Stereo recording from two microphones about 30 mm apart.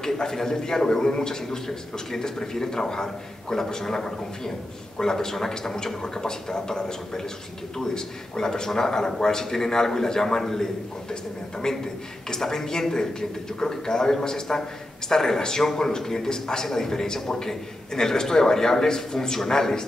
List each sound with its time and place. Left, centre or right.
0.0 s a man's voice: centre